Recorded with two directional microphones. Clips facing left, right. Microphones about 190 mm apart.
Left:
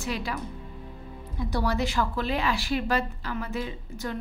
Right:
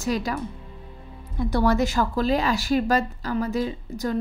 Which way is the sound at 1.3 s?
50° right (ahead or behind).